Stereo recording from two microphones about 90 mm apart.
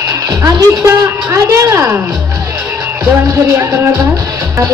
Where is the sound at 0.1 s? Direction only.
35° right (ahead or behind).